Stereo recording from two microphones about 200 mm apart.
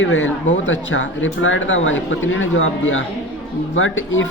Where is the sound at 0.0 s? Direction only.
75° left (ahead or behind).